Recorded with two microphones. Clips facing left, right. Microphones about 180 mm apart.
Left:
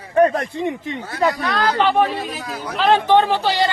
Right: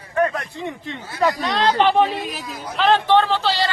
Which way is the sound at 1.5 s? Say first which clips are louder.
Right 1 dB; 25° right (ahead or behind).